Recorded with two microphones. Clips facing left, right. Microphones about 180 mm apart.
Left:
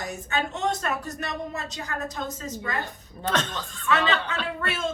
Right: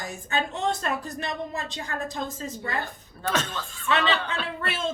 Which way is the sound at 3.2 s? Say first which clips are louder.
Left 1 dB; 10° right (ahead or behind).